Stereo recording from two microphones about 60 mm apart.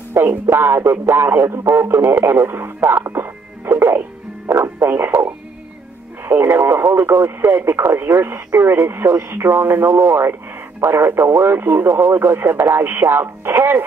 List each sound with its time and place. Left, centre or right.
0.1 s speech: right